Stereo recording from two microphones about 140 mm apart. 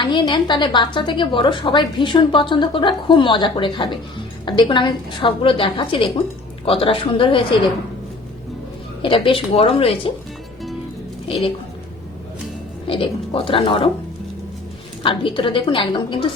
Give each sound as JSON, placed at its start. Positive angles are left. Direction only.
{"t": 0.0, "sound": "a woman's voice", "side_deg": 35}
{"t": 9.0, "sound": "a woman's voice", "side_deg": 40}
{"t": 11.3, "sound": "a woman's voice", "side_deg": 40}
{"t": 12.9, "sound": "a woman's voice", "side_deg": 40}
{"t": 15.0, "sound": "a woman's voice", "side_deg": 35}